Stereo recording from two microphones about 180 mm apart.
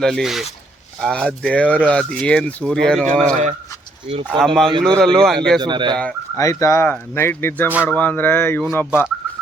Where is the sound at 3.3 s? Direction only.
40° right (ahead or behind).